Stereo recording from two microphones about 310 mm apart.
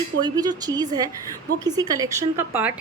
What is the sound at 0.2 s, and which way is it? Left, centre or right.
Speech, centre.